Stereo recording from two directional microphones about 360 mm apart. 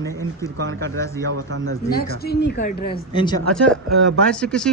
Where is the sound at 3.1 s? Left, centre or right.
Centre.